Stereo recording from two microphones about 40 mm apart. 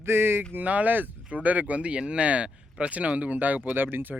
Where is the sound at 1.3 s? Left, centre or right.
Right.